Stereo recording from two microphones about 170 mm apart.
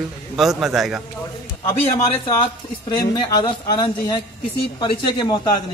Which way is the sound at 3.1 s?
25° left (ahead or behind).